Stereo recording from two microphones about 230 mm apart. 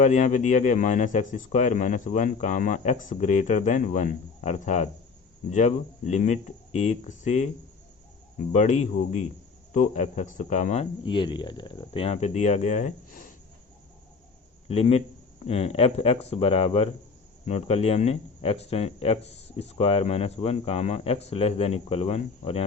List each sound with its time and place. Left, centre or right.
0.0 s speech: left
8.5 s speech: left
14.7 s speech: left